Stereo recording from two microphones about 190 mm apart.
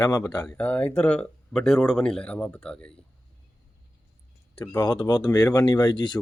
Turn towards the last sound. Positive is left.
turn(degrees=25)  # may be behind; listen again after turning